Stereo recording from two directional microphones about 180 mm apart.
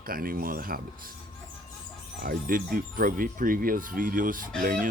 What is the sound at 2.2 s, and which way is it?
Speech, 55° right (ahead or behind).